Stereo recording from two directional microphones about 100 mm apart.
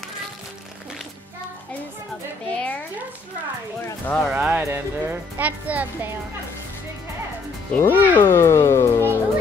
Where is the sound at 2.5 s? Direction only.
15° left (ahead or behind).